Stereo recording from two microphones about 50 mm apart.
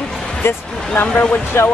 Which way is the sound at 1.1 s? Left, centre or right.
Left.